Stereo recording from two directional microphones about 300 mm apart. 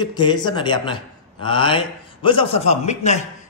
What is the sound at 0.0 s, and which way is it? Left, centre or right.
A man's voice, centre.